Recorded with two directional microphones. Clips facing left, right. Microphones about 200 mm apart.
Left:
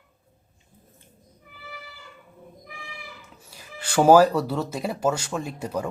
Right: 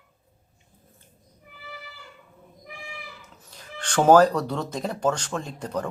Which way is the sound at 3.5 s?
10° left (ahead or behind).